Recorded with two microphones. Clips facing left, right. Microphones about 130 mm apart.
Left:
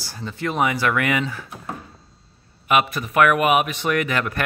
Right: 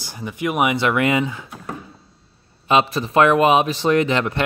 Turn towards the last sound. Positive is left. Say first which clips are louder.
# right 4 dB
turn(degrees=-25)  # may be behind; listen again after turning